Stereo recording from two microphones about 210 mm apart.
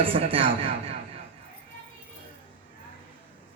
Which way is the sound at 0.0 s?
25° right (ahead or behind).